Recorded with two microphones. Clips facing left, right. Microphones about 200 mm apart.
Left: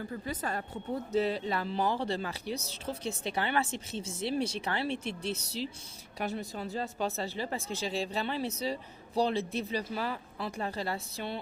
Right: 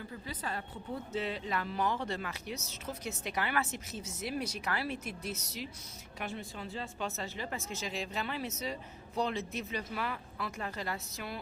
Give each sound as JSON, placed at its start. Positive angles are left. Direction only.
{"t": 0.0, "sound": "speech", "side_deg": 45}